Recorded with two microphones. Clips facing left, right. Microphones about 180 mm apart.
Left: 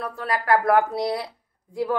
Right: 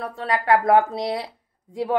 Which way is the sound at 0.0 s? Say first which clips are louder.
Right 2 dB; 25° right (ahead or behind).